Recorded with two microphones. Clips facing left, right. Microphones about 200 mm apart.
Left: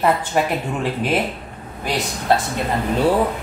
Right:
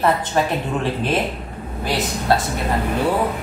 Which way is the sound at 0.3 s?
15° left (ahead or behind).